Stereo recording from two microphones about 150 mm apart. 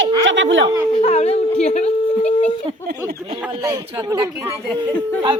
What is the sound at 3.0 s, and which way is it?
Speech, 40° right (ahead or behind).